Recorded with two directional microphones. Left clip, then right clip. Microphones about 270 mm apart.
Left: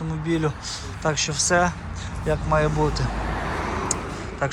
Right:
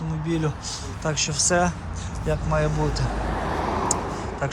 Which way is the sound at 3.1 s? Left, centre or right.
Right.